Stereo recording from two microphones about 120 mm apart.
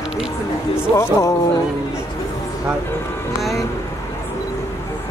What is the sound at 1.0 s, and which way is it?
Speech, 25° left (ahead or behind).